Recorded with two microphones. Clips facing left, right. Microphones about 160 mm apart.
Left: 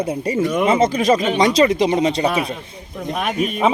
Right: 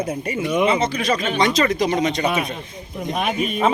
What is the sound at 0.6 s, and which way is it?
Speech, 45° left (ahead or behind).